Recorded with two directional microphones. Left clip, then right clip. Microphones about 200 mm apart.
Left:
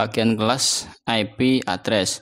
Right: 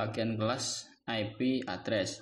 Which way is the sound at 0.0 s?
40° left (ahead or behind).